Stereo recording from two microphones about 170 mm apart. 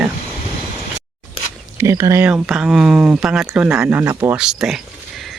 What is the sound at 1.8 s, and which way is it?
Speech, 20° right (ahead or behind).